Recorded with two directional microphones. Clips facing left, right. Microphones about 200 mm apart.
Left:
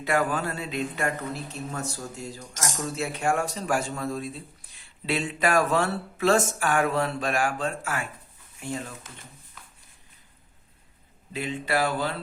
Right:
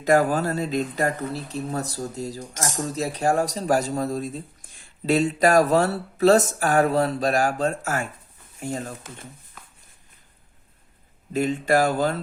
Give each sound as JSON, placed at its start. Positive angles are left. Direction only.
{"t": 0.0, "sound": "speech", "side_deg": -40}
{"t": 11.3, "sound": "speech", "side_deg": -45}